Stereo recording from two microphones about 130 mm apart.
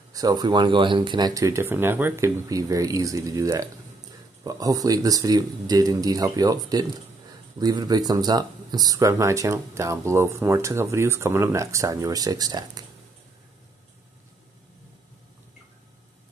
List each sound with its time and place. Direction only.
0.1 s speech: 30° right (ahead or behind)